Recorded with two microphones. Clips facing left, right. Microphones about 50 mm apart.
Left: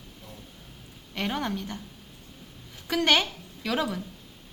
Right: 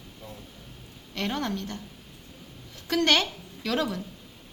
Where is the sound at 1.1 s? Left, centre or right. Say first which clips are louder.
Even; centre.